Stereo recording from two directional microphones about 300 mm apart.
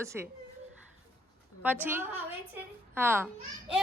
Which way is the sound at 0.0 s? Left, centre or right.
Centre.